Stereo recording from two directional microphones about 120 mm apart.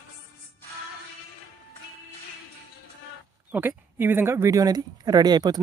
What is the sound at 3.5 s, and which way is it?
Speech, 15° right (ahead or behind).